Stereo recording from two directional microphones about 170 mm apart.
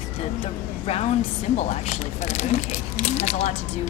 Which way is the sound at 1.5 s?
40° left (ahead or behind).